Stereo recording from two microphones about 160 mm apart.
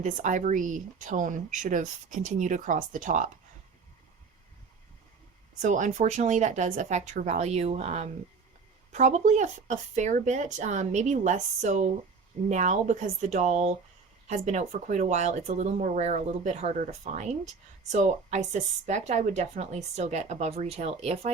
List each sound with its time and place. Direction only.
0.0 s speech: 50° right (ahead or behind)
5.6 s speech: 50° right (ahead or behind)